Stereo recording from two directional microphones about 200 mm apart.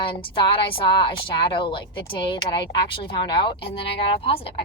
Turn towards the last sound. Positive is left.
turn(degrees=25)  # may be behind; listen again after turning